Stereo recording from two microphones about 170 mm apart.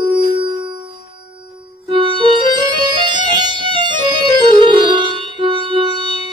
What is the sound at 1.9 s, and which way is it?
Music, 30° right (ahead or behind).